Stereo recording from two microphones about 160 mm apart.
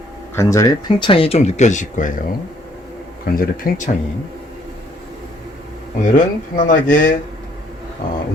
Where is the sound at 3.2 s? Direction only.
65° left (ahead or behind).